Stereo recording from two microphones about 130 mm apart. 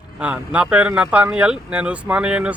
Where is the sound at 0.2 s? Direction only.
10° right (ahead or behind).